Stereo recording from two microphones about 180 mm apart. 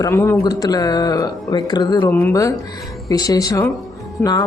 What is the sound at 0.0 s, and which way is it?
Speech, 15° left (ahead or behind).